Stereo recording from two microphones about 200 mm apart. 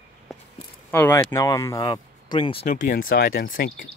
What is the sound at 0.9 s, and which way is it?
Speech, 10° left (ahead or behind).